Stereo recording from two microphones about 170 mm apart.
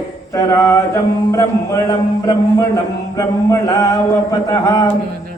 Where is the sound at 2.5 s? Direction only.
15° left (ahead or behind).